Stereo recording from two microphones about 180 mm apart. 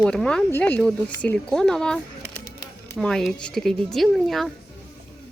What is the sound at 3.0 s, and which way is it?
Speech, 5° left (ahead or behind).